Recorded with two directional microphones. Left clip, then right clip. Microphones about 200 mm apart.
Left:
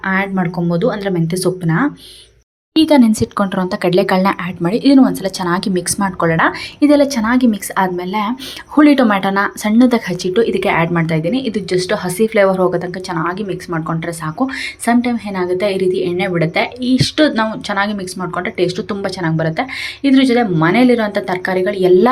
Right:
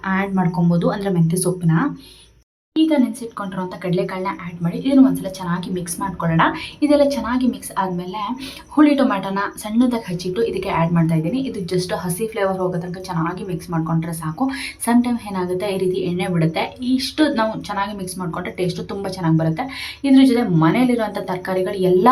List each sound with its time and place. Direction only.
0.0 s speech: 15° left (ahead or behind)
2.8 s speech: 35° left (ahead or behind); by 22.1 s 15° left (ahead or behind)